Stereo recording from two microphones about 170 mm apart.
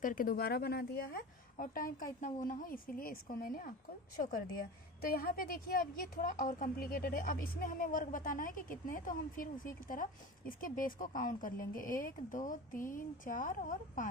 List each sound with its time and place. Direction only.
0.0 s a woman's voice: 55° left (ahead or behind)